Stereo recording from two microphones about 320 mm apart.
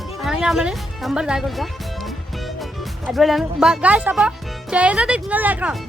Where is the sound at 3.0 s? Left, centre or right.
Centre.